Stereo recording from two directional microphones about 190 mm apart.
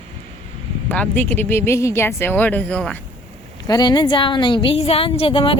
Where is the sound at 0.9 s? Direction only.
10° left (ahead or behind).